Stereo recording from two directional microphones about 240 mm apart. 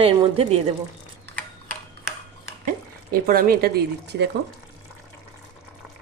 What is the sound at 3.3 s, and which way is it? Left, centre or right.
Speech, right.